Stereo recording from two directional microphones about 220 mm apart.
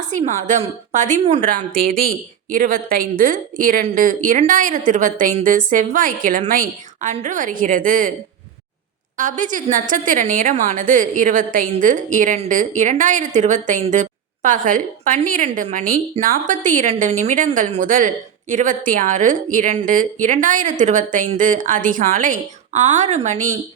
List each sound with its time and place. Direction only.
0.0 s speech: 35° right (ahead or behind)
9.1 s speech: 35° right (ahead or behind)